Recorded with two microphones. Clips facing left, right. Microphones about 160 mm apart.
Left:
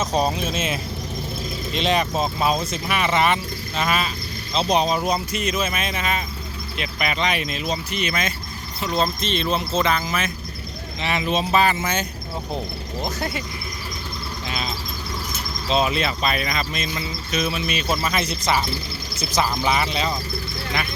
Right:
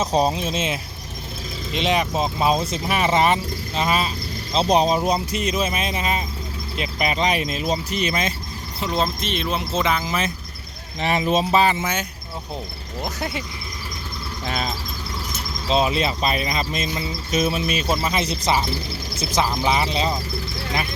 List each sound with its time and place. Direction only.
0.0 s speech: 30° right (ahead or behind)
1.7 s speech: 15° right (ahead or behind); by 8.3 s 35° right (ahead or behind)
8.8 s speech: 15° right (ahead or behind)
11.5 s speech: 25° right (ahead or behind)
15.7 s speech: 30° right (ahead or behind)
17.8 s speech: 20° right (ahead or behind)
19.6 s speech: 25° right (ahead or behind)